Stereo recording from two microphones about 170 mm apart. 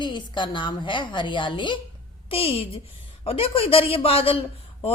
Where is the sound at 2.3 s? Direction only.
35° left (ahead or behind).